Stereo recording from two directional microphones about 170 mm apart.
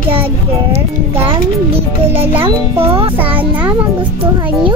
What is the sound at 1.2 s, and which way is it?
Music, 35° right (ahead or behind).